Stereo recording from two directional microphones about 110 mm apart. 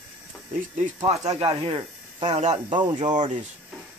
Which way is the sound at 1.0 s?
75° right (ahead or behind).